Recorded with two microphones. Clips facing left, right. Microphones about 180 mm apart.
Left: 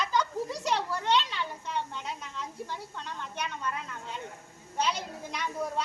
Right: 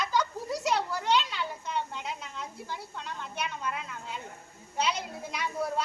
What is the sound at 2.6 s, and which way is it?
A woman's voice, 10° right (ahead or behind).